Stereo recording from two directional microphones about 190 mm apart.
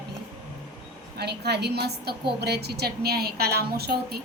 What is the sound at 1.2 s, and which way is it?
A woman's voice, 60° right (ahead or behind).